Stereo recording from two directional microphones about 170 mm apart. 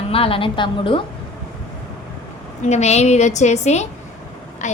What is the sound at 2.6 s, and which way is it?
A woman's voice, 40° left (ahead or behind).